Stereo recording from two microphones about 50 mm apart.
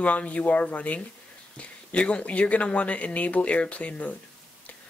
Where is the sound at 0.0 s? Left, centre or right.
Left.